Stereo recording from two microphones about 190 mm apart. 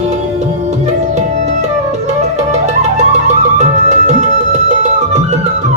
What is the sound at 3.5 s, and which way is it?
Music, 40° right (ahead or behind).